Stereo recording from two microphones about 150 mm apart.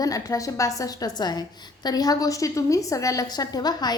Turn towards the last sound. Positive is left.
turn(degrees=25)  # may be behind; listen again after turning